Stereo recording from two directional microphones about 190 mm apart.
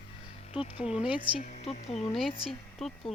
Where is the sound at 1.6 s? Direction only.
35° left (ahead or behind).